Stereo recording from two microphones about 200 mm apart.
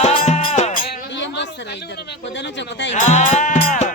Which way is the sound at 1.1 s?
65° left (ahead or behind).